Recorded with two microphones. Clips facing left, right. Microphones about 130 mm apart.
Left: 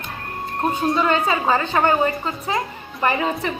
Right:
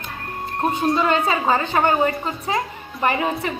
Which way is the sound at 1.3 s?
20° right (ahead or behind).